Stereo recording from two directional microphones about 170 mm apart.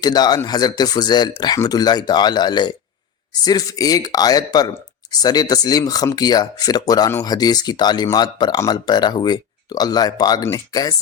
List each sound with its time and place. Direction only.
0.0 s speech: 25° left (ahead or behind)